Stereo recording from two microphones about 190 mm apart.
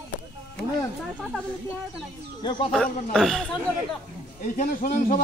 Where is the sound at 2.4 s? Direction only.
25° left (ahead or behind).